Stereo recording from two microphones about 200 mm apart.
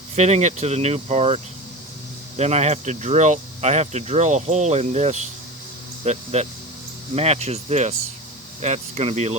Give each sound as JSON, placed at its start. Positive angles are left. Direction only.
{"t": 0.2, "sound": "speech", "side_deg": -35}